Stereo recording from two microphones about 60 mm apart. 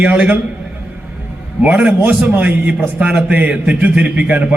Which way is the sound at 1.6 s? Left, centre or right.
Right.